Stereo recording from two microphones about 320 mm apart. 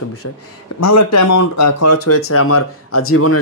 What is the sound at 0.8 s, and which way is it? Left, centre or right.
Speech, left.